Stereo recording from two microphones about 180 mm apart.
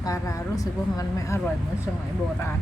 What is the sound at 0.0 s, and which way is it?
Speech, 20° left (ahead or behind).